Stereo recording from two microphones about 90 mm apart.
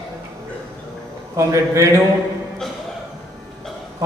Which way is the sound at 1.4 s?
35° right (ahead or behind).